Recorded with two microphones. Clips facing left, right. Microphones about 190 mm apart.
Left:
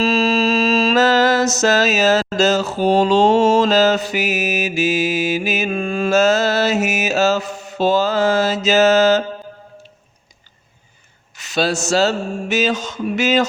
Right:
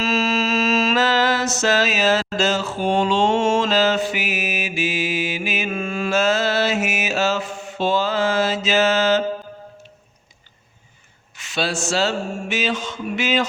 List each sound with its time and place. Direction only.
0.0 s mantra: 35° left (ahead or behind)
11.3 s speech: 40° left (ahead or behind)